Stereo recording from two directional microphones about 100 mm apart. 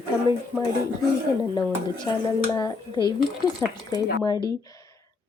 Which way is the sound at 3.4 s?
40° left (ahead or behind).